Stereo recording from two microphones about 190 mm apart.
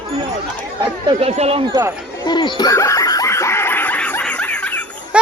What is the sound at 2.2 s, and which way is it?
Snicker, 20° left (ahead or behind).